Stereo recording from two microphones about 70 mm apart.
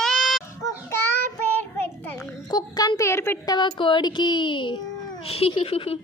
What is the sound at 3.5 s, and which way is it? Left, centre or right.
Speech, left.